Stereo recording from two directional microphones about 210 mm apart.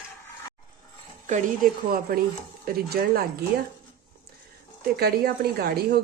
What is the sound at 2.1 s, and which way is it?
A woman's voice, 45° right (ahead or behind).